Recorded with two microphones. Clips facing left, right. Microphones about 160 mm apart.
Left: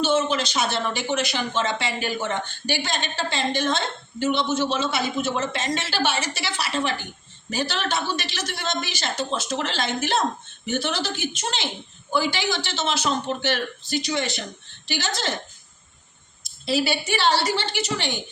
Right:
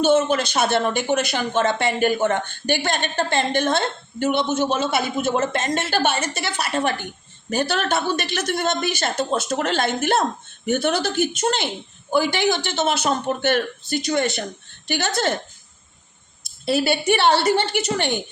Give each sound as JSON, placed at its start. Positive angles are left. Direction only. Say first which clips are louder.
{"t": 0.0, "sound": "speech", "louder": "right 4 dB", "side_deg": -50}
{"t": 16.6, "sound": "speech", "louder": "right 4 dB", "side_deg": -55}